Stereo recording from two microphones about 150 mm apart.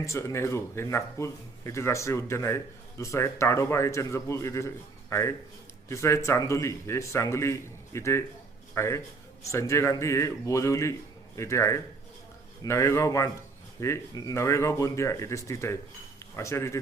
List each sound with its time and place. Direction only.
0.0 s a man's voice: 20° left (ahead or behind)